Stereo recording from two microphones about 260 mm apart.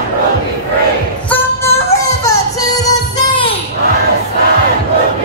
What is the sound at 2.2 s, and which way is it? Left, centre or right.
Music, centre.